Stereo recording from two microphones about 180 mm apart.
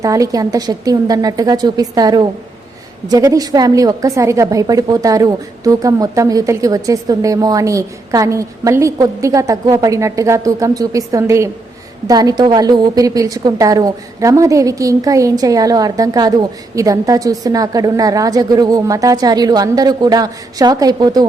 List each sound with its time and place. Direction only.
0.0 s a woman's voice: 20° right (ahead or behind)